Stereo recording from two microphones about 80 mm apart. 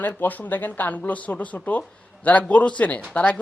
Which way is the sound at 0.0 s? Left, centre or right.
Left.